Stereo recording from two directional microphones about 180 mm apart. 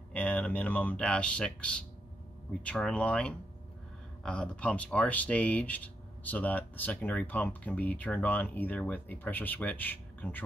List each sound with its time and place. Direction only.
0.1 s speech: 5° left (ahead or behind)